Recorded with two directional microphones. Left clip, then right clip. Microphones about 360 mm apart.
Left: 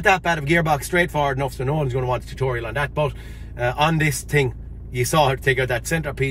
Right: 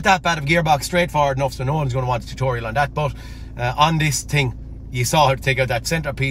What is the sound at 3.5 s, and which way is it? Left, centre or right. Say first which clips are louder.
Speech: right 2 dB; centre.